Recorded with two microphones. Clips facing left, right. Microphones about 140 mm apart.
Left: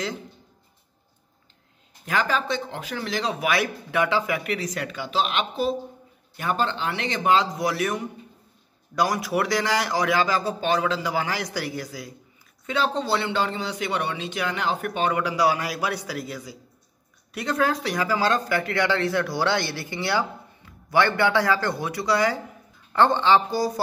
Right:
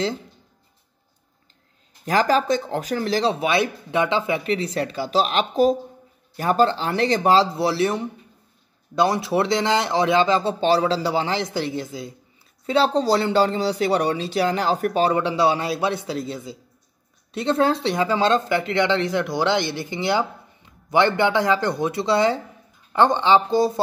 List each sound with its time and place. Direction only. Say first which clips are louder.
2.0 s speech: right 6 dB; 35° right (ahead or behind)